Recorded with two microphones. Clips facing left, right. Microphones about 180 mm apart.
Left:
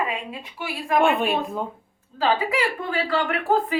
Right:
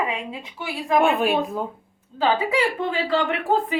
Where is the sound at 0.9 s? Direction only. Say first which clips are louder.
Right 1 dB; centre (ahead or behind).